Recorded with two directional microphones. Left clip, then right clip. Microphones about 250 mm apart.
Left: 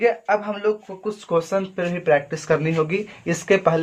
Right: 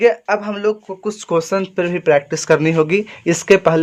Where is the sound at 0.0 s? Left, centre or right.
Right.